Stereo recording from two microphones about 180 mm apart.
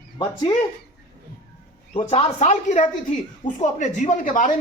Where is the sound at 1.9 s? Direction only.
30° left (ahead or behind).